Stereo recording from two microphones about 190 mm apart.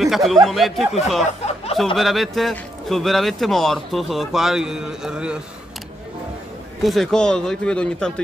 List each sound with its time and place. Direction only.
0.0 s a man's voice: centre (ahead or behind)
1.4 s snicker: 30° left (ahead or behind)
2.0 s a man's voice: centre (ahead or behind)
6.8 s a man's voice: centre (ahead or behind)